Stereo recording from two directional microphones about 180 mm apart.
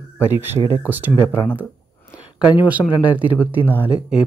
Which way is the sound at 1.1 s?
15° left (ahead or behind).